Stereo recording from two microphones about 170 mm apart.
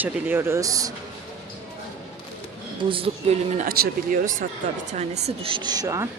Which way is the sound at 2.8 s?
30° right (ahead or behind).